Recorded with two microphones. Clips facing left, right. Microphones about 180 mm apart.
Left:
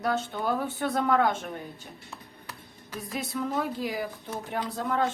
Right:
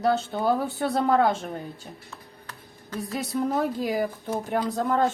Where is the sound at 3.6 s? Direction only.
45° right (ahead or behind).